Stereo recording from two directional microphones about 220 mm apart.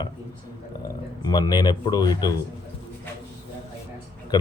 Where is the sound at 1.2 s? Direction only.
20° left (ahead or behind).